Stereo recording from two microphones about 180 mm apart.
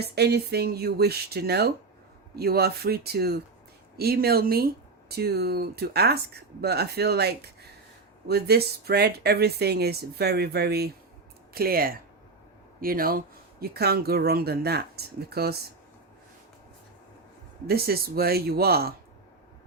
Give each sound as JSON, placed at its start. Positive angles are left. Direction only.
{"t": 0.0, "sound": "speech", "side_deg": -65}
{"t": 17.7, "sound": "speech", "side_deg": -60}